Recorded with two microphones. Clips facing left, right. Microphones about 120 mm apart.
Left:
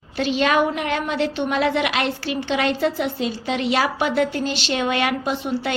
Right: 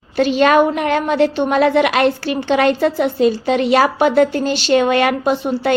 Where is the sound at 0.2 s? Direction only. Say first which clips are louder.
Right 7 dB; 50° right (ahead or behind).